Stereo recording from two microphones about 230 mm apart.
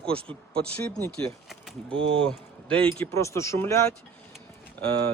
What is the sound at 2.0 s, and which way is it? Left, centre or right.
Speech, right.